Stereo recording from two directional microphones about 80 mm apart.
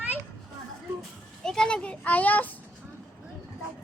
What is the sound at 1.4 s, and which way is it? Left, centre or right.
A child's voice, centre.